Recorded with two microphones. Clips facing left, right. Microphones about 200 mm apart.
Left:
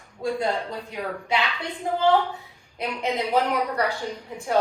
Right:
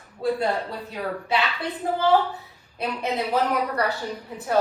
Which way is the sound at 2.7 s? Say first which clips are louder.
Even; 15° left (ahead or behind).